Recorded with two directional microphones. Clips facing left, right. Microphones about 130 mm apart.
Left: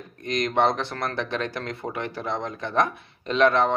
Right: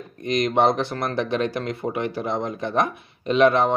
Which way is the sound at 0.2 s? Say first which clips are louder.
Right 3 dB; 15° right (ahead or behind).